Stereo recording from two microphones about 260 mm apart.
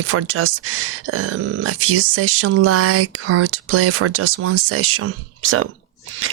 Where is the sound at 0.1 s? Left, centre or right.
Right.